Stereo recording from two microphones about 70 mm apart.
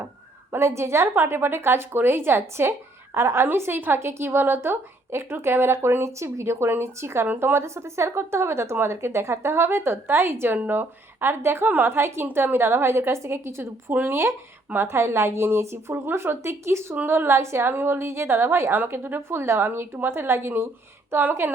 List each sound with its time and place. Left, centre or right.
0.5 s a woman's voice: right